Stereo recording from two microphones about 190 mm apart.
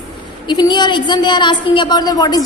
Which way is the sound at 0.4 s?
25° left (ahead or behind).